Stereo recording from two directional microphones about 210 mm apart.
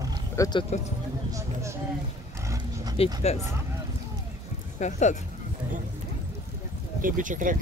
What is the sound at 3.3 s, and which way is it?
Speech, 30° left (ahead or behind).